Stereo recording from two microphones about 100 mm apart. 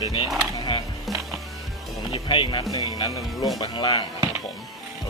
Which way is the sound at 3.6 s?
55° left (ahead or behind).